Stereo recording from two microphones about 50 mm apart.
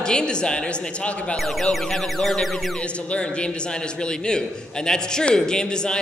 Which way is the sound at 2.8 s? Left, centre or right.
Left.